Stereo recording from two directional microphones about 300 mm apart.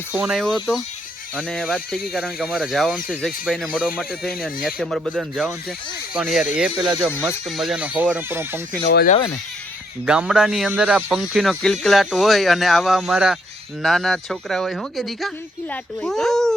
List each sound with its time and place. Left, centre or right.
0.1 s speech: centre
8.9 s speech: left
10.1 s speech: centre